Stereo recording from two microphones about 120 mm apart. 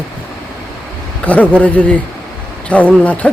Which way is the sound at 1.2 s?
10° left (ahead or behind).